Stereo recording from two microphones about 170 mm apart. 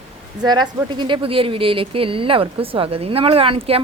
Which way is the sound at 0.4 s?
25° right (ahead or behind).